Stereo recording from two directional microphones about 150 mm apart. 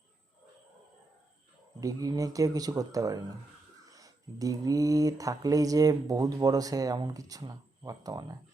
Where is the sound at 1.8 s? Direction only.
25° right (ahead or behind).